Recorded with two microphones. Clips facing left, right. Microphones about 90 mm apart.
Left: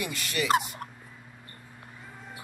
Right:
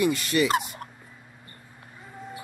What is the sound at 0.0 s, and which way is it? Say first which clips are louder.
Speech: right 9 dB; 40° right (ahead or behind).